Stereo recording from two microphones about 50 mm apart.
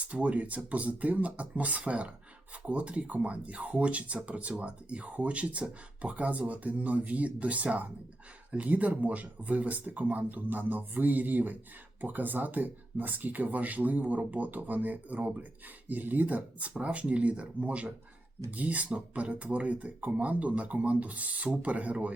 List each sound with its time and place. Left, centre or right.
0.0 s speech: right